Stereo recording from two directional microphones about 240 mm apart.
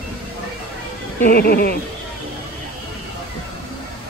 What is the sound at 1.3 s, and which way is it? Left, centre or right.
Speech, left.